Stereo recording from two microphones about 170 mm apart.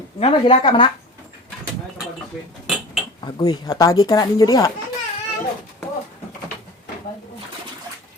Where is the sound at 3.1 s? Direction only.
25° left (ahead or behind).